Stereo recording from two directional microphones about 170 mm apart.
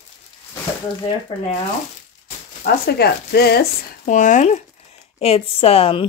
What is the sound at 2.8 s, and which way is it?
Speech, 70° left (ahead or behind).